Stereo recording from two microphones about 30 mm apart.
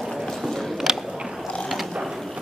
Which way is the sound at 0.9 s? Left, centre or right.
Centre.